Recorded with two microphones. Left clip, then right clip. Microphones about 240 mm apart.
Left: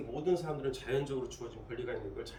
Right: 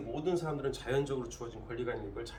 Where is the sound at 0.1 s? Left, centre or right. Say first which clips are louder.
Left 1 dB; centre.